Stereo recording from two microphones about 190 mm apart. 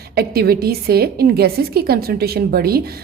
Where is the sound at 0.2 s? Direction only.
55° right (ahead or behind).